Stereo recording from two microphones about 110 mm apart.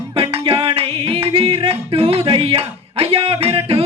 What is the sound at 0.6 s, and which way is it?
Music, 60° right (ahead or behind).